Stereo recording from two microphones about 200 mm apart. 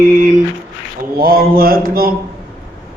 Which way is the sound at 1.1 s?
45° right (ahead or behind).